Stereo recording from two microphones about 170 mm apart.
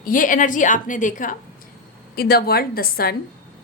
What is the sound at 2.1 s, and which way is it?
A woman's voice, 65° left (ahead or behind).